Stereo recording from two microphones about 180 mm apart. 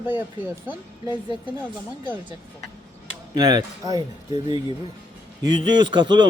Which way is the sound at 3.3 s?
20° right (ahead or behind).